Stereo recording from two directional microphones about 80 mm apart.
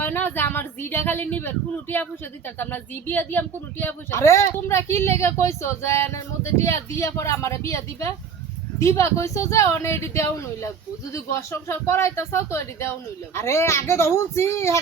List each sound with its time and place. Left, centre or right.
0.0 s a woman's voice: left